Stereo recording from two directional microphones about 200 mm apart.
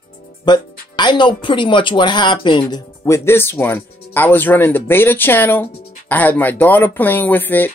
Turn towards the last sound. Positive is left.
turn(degrees=10)  # may be behind; listen again after turning